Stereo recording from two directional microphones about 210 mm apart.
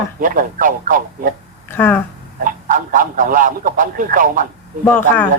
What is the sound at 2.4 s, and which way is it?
Speech, 40° right (ahead or behind).